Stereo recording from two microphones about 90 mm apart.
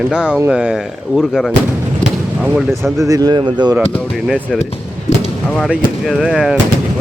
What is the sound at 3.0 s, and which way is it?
Speech, 45° right (ahead or behind).